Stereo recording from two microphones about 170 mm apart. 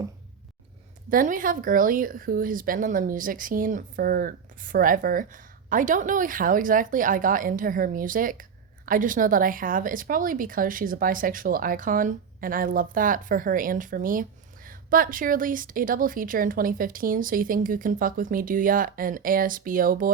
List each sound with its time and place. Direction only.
1.1 s speech: 50° right (ahead or behind)